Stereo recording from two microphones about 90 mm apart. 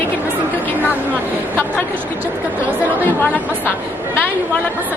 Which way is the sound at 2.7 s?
20° right (ahead or behind).